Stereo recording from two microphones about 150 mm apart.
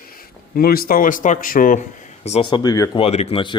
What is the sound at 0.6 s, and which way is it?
Speech, 85° left.